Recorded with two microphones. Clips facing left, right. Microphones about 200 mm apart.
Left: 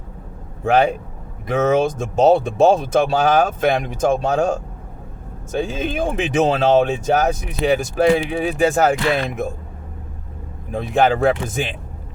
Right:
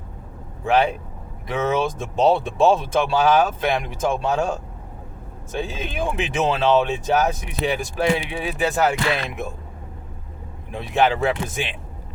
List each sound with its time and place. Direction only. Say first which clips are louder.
0.6 s speech: left 3 dB; 45° left (ahead or behind)
10.7 s speech: left 3 dB; 45° left (ahead or behind)